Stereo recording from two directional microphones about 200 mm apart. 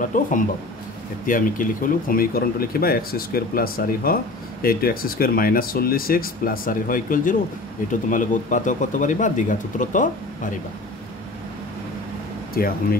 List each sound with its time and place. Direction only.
0.0 s speech: 40° left (ahead or behind)